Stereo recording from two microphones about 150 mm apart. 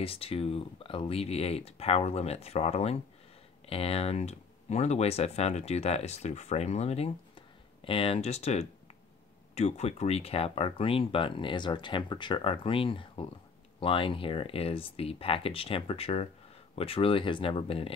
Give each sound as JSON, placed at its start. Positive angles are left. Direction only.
{"t": 0.0, "sound": "speech", "side_deg": 40}